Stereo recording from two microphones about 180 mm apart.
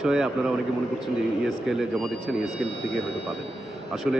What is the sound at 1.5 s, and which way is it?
Speech, centre (ahead or behind).